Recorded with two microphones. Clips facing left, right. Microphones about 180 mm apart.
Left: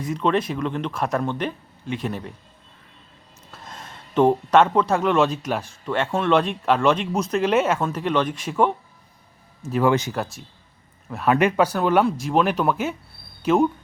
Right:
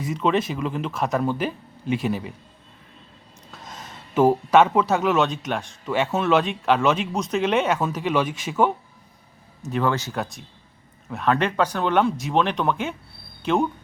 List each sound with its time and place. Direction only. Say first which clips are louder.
0.0 s speech: even; 5° right (ahead or behind)
3.5 s speech: even; centre (ahead or behind)
9.8 s speech: left 5 dB; 20° left (ahead or behind)
10.1 s speech: left 1 dB; centre (ahead or behind)